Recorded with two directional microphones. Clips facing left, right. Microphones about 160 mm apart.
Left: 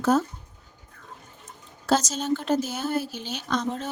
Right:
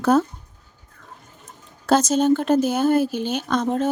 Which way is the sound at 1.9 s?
55° right (ahead or behind).